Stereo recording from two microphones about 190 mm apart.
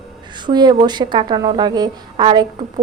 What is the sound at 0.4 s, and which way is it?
A woman's voice, 25° right (ahead or behind).